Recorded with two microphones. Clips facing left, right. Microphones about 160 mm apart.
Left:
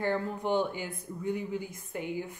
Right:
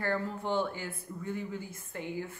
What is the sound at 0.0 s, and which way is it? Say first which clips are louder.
A man's voice: left 2 dB; 15° left (ahead or behind).